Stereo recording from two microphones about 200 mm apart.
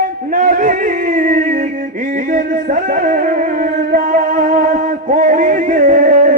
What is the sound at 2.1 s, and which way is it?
Music, 40° right (ahead or behind).